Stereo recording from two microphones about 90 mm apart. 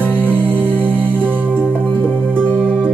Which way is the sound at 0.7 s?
15° left (ahead or behind).